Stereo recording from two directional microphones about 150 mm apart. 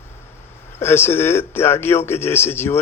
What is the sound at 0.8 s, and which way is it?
Speech, 15° left (ahead or behind).